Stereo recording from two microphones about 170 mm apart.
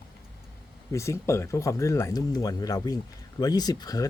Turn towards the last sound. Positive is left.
turn(degrees=20)  # may be behind; listen again after turning